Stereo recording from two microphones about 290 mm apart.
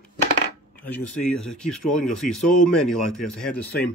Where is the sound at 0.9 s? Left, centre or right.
Centre.